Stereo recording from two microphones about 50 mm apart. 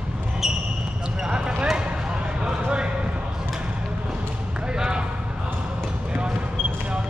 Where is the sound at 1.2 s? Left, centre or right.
Centre.